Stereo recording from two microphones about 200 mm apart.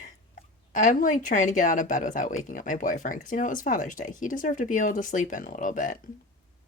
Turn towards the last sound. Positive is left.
turn(degrees=40)  # may be behind; listen again after turning